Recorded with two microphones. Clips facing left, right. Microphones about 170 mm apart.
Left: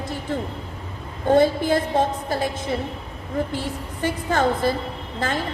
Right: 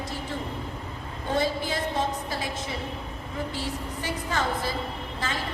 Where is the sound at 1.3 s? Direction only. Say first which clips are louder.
Left 10 dB; 55° left (ahead or behind).